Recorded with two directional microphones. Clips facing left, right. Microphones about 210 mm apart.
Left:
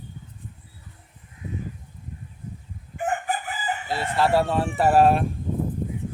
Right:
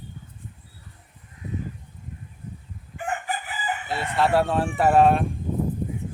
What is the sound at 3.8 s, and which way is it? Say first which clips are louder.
Chicken: left 2 dB; 30° left (ahead or behind).